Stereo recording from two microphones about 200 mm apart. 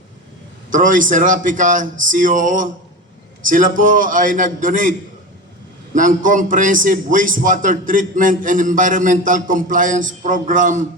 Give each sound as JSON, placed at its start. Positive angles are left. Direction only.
{"t": 0.7, "sound": "a man's voice", "side_deg": -40}